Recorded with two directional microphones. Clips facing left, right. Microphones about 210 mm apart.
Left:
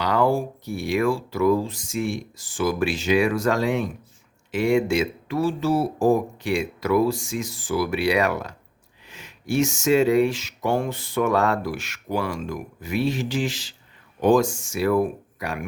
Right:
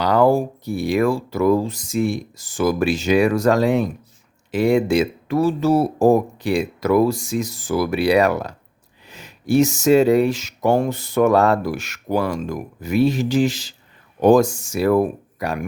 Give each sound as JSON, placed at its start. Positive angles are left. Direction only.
{"t": 0.0, "sound": "speech", "side_deg": -40}